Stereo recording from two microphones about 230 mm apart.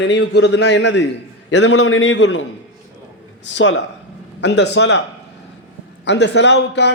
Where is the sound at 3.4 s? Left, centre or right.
Left.